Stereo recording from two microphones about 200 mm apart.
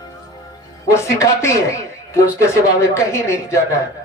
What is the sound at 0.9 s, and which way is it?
Speech, 15° left (ahead or behind).